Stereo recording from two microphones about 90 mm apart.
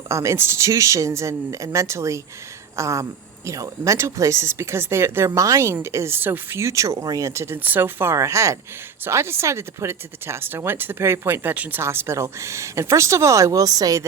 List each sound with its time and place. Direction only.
0.1 s speech: 35° right (ahead or behind)
7.6 s speech: 20° right (ahead or behind); by 14.0 s 45° right (ahead or behind)